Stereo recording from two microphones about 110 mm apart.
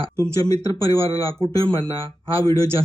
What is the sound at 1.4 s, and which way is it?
Speech, 50° right (ahead or behind).